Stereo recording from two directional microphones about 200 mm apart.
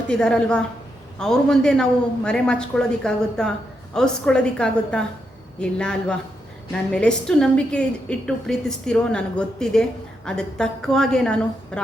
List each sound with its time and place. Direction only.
0.1 s a woman's voice: 5° left (ahead or behind)